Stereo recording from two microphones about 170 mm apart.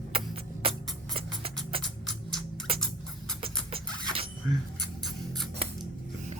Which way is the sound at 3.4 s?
35° right (ahead or behind).